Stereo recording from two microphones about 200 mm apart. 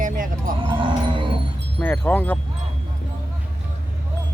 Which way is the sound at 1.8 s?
10° left (ahead or behind).